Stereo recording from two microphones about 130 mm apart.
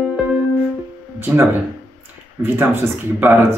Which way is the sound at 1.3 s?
15° right (ahead or behind).